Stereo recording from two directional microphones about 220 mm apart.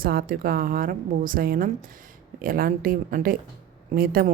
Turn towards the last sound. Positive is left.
turn(degrees=-40)  # may be behind; listen again after turning